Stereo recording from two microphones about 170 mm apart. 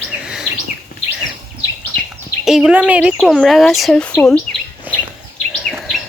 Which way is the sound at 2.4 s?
5° right (ahead or behind).